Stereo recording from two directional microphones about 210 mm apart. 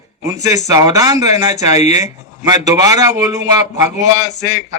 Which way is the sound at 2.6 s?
15° right (ahead or behind).